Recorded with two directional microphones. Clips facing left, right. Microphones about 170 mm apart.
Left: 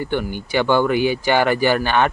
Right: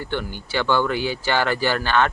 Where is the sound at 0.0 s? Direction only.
15° left (ahead or behind).